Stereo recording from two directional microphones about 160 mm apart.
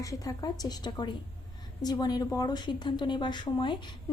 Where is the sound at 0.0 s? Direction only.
20° left (ahead or behind).